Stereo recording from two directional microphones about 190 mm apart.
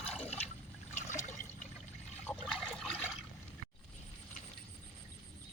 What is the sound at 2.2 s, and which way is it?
Water, 5° left (ahead or behind).